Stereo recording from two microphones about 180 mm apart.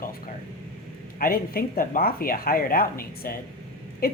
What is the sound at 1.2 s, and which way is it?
Speech, 55° left (ahead or behind).